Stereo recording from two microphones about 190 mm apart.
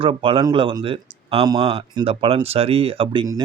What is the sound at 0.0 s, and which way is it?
Speech, 25° right (ahead or behind).